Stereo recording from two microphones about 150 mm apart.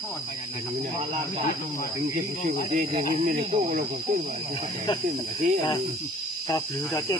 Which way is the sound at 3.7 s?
90° right.